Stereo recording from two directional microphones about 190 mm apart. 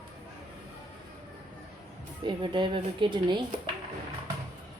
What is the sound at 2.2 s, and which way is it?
Speech, 25° right (ahead or behind).